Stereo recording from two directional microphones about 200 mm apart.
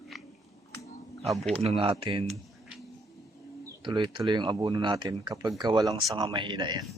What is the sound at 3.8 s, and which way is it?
Speech, 25° right (ahead or behind).